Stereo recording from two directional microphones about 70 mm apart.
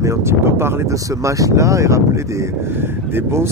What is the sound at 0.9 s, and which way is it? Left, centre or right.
Speech, right.